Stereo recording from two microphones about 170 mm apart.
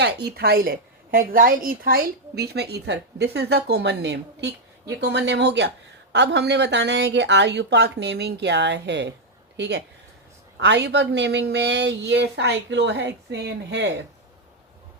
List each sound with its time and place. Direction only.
0.0 s a woman's voice: 75° right (ahead or behind)
1.1 s a woman's voice: 55° right (ahead or behind); by 13.9 s 90° right